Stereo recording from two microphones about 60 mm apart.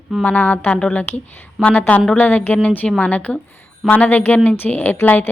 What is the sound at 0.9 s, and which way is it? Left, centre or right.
A woman's voice, left.